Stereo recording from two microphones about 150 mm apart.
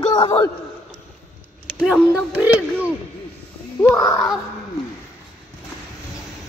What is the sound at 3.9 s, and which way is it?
Speech, 25° left (ahead or behind).